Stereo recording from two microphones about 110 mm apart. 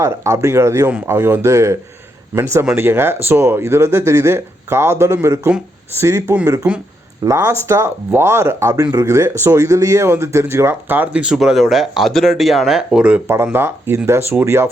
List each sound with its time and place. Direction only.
0.0 s speech: 25° right (ahead or behind); by 13.2 s 10° right (ahead or behind)
13.2 s speech: 20° right (ahead or behind)